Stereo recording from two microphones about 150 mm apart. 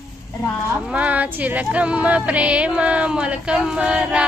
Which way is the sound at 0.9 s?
10° right (ahead or behind).